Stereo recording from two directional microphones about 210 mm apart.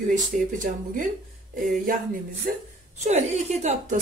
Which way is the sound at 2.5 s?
45° right (ahead or behind).